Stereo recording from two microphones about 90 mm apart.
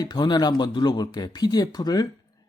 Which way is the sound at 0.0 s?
55° left (ahead or behind).